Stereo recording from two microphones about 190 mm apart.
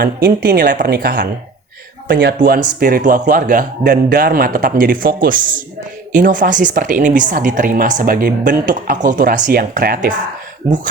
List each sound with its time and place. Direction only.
0.0 s speech: 55° right (ahead or behind)
2.8 s speech: 45° right (ahead or behind)
10.6 s speech: 15° right (ahead or behind)